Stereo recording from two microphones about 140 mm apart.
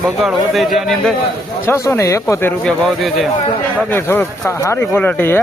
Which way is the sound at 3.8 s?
15° left (ahead or behind).